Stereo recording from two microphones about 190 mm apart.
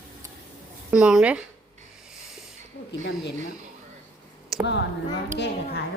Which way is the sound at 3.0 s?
65° left (ahead or behind).